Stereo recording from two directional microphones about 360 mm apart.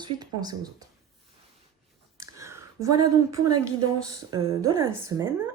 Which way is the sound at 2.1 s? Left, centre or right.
Centre.